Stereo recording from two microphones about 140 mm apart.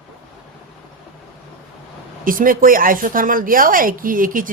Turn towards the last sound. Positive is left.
turn(degrees=-75)  # may be behind; listen again after turning